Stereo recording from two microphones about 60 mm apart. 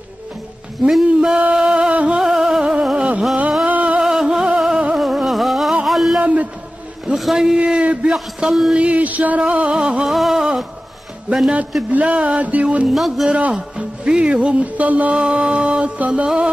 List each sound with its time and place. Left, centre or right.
0.8 s speech: centre
1.5 s music: centre
2.1 s music: centre
3.6 s music: right
4.0 s music: centre
4.9 s a sound: centre
6.2 s a sound: right
7.2 s a sound: centre
8.1 s a man's voice: centre
8.7 s music: right
10.0 s a sound: centre
11.9 s music: right
12.9 s a man's voice: centre
13.3 s music: right